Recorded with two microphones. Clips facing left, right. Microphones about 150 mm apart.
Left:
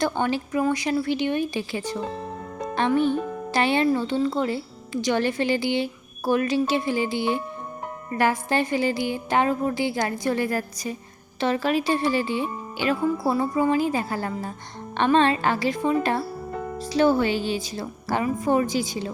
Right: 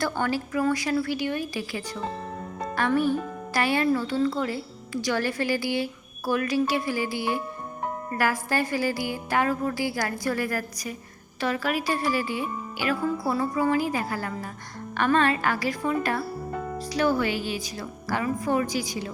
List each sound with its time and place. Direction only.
0.0 s speech: 20° left (ahead or behind)